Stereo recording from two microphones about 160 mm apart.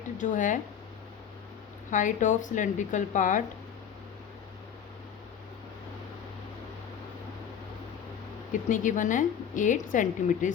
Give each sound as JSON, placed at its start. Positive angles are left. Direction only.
{"t": 0.2, "sound": "a woman's voice", "side_deg": 50}
{"t": 1.9, "sound": "a woman's voice", "side_deg": 55}
{"t": 8.7, "sound": "a woman's voice", "side_deg": 55}